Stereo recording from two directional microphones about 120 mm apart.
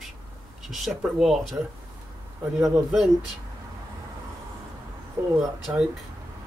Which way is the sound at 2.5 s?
30° right (ahead or behind).